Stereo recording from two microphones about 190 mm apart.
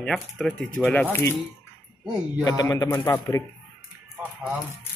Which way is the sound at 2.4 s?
20° left (ahead or behind).